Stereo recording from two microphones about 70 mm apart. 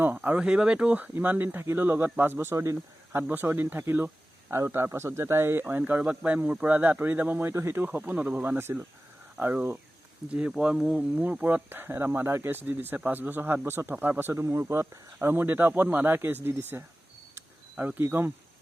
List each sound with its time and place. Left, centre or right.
0.0 s speech: right
3.2 s speech: right
4.9 s speech: right
7.5 s speech: right
7.8 s speech: right
9.4 s speech: right
10.8 s speech: centre
11.1 s speech: right